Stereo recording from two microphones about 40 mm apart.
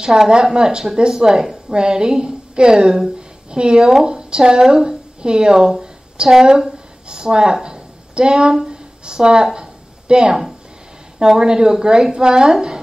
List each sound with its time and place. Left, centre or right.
0.3 s a woman's voice: centre
3.8 s speech: centre
4.1 s speech: centre
4.6 s a woman's voice: centre
7.6 s a sound: right
9.0 s a woman's voice: right